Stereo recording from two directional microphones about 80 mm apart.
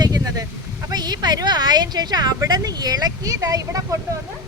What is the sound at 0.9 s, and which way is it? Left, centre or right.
A woman's voice, right.